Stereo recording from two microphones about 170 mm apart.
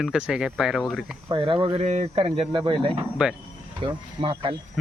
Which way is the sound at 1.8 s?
40° right (ahead or behind).